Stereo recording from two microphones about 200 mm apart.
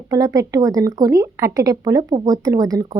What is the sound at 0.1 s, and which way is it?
A woman's voice, 15° right (ahead or behind).